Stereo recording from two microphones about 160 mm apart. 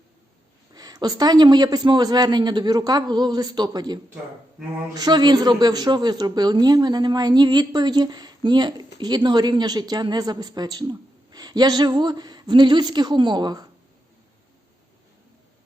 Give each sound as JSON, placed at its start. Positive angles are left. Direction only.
{"t": 0.7, "sound": "speech", "side_deg": -25}